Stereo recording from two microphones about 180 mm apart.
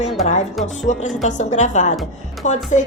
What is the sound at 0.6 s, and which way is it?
A woman's voice, 40° left (ahead or behind).